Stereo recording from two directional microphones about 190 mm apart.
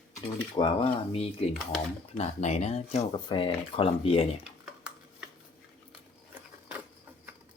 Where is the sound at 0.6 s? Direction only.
25° left (ahead or behind).